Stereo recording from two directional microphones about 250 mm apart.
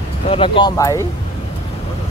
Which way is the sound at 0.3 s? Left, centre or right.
Centre.